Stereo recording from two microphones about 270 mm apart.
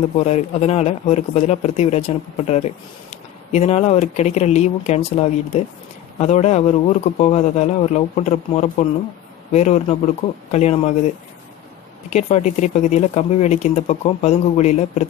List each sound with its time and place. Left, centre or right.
0.2 s speech: left
12.1 s speech: left